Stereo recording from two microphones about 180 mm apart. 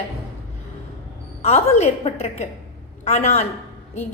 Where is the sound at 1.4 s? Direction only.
35° left (ahead or behind).